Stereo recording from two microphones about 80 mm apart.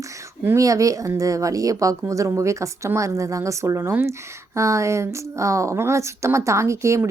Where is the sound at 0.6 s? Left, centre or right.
Right.